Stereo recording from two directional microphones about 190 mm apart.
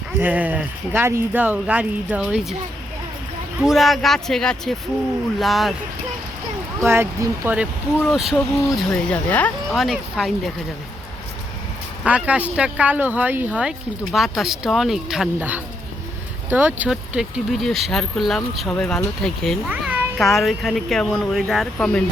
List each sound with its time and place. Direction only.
0.2 s speech: 10° right (ahead or behind)
3.6 s speech: centre (ahead or behind)
6.7 s speech: 10° right (ahead or behind)
12.0 s speech: 5° right (ahead or behind)
19.7 s speech: 10° right (ahead or behind)